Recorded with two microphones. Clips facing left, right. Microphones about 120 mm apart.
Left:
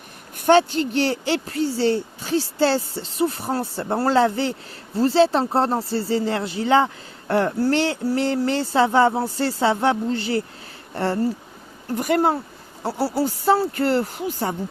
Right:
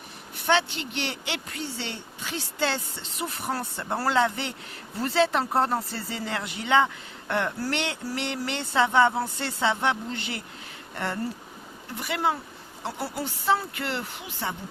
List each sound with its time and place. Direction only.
0.3 s speech: 45° left (ahead or behind)
11.9 s speech: 45° left (ahead or behind)